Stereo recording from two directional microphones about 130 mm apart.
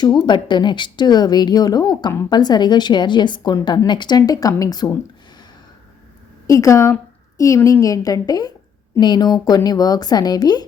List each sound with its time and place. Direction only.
0.3 s a woman's voice: 35° left (ahead or behind)
6.5 s a woman's voice: 25° left (ahead or behind)